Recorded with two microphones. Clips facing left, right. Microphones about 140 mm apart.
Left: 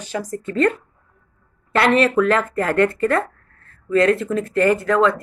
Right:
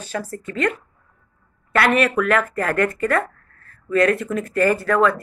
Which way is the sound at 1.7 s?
25° left (ahead or behind).